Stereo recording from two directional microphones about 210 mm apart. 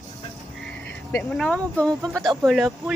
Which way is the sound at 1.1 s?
5° left (ahead or behind).